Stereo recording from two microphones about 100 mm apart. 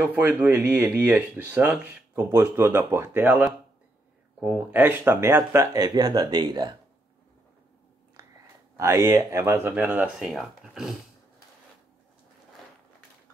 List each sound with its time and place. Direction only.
0.1 s speech: 15° right (ahead or behind); by 6.7 s 45° right (ahead or behind)
8.7 s speech: 30° right (ahead or behind)
10.1 s speech: centre (ahead or behind)